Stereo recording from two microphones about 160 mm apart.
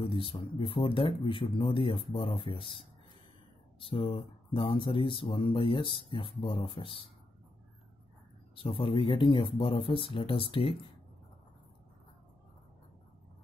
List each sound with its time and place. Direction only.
0.0 s speech: 35° left (ahead or behind)
3.8 s speech: 35° left (ahead or behind)
8.5 s speech: 35° left (ahead or behind)